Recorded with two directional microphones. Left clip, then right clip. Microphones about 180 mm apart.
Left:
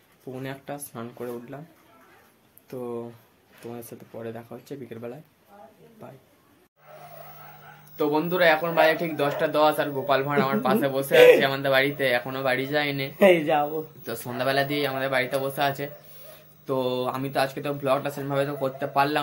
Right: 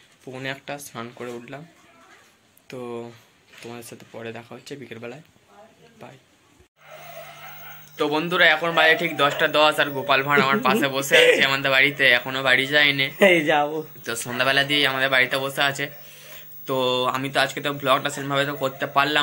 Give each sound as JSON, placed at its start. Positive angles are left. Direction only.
{"t": 0.3, "sound": "speech", "side_deg": 5}
{"t": 2.7, "sound": "speech", "side_deg": 5}
{"t": 8.0, "sound": "speech", "side_deg": 5}
{"t": 11.1, "sound": "speech", "side_deg": 0}
{"t": 11.4, "sound": "speech", "side_deg": 20}
{"t": 12.2, "sound": "speech", "side_deg": 10}
{"t": 13.1, "sound": "speech", "side_deg": -20}
{"t": 14.0, "sound": "speech", "side_deg": 10}